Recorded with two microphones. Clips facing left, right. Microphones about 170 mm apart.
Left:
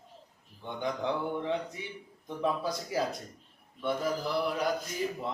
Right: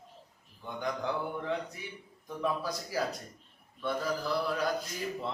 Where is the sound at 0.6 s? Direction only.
20° left (ahead or behind).